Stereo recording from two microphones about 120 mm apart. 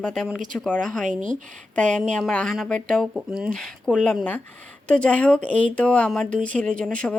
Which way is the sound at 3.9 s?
10° left (ahead or behind).